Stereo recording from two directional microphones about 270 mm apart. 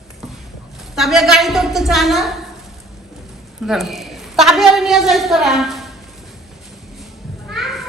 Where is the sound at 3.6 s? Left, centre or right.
Centre.